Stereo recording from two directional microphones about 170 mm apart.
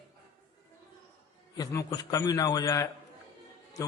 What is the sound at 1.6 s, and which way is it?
A man's voice, 20° left (ahead or behind).